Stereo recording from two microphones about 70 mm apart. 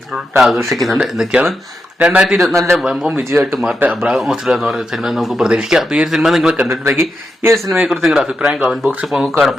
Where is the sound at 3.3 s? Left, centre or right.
Right.